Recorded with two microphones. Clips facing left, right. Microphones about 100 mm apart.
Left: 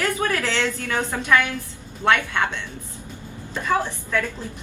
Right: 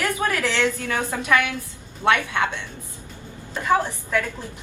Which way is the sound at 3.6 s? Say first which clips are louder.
Right 2 dB; 15° right (ahead or behind).